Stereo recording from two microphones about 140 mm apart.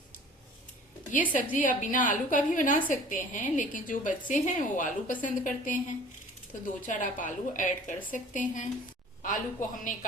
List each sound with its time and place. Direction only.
1.5 s a woman's voice: 65° left (ahead or behind)
6.8 s a woman's voice: 65° left (ahead or behind)